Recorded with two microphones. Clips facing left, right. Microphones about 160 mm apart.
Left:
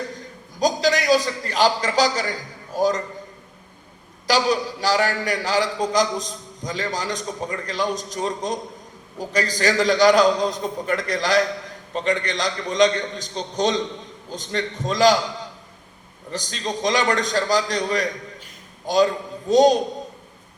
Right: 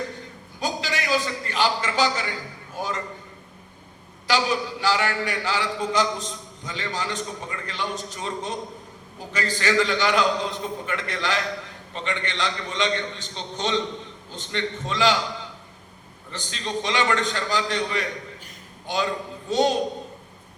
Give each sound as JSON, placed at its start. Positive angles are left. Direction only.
{"t": 0.6, "sound": "a man's voice", "side_deg": 40}
{"t": 4.3, "sound": "a man's voice", "side_deg": 40}
{"t": 16.3, "sound": "a man's voice", "side_deg": 40}